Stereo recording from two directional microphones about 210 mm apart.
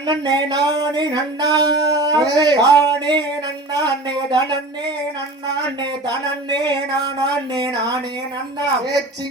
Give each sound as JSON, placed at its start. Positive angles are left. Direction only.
{"t": 0.1, "sound": "speech", "side_deg": -20}
{"t": 5.8, "sound": "speech", "side_deg": -20}